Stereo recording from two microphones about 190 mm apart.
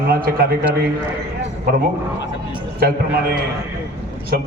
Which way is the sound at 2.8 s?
55° right (ahead or behind).